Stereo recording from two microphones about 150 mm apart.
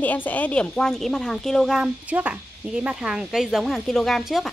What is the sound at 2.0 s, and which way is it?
Speech, 10° right (ahead or behind).